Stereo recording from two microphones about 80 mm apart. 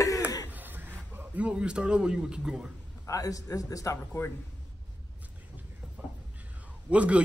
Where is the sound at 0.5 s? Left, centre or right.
Right.